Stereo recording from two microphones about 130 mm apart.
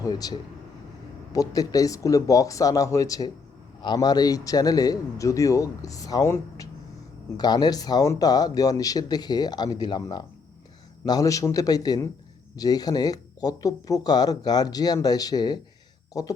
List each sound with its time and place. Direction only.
0.0 s a man's voice: 30° left (ahead or behind)